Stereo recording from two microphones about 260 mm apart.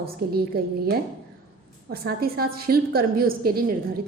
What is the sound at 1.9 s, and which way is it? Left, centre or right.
A woman's voice, right.